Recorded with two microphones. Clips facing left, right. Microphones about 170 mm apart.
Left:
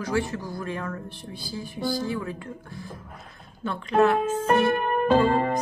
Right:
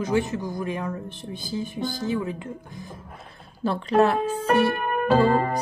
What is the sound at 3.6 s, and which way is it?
Speech, 35° right (ahead or behind).